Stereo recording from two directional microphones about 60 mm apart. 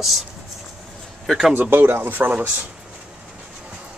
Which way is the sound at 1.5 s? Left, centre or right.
Right.